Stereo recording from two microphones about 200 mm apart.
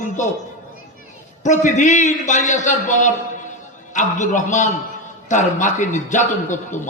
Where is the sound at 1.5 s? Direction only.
40° left (ahead or behind).